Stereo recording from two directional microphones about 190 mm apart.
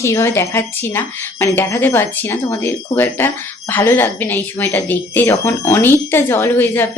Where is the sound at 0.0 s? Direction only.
15° left (ahead or behind).